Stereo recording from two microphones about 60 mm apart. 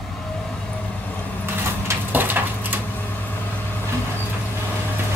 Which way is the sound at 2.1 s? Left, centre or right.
Right.